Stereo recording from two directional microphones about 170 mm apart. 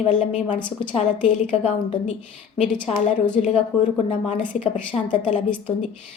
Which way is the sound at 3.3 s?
40° left (ahead or behind).